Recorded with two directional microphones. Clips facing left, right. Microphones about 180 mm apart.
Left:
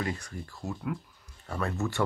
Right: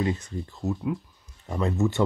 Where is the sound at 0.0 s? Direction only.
20° right (ahead or behind).